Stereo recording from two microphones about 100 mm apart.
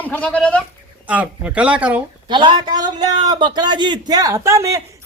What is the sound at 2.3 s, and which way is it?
A man's voice, 50° right (ahead or behind).